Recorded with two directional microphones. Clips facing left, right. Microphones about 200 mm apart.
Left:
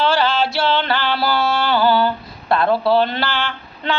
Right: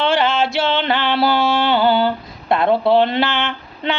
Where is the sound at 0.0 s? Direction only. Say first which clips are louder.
Right 1 dB; 20° right (ahead or behind).